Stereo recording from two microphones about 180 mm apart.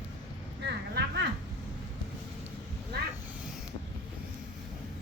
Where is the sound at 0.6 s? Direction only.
70° right (ahead or behind).